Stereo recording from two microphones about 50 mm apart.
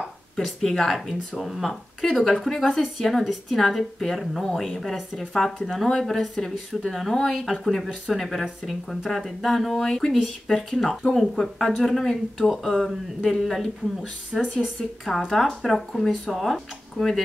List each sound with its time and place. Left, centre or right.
0.4 s speech: centre
14.3 s speech: centre
15.0 s speech: centre